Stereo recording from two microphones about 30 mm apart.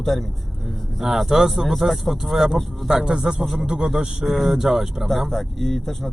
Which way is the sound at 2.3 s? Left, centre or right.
Centre.